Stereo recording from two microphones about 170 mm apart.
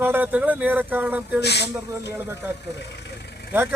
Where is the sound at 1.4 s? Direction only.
75° left (ahead or behind).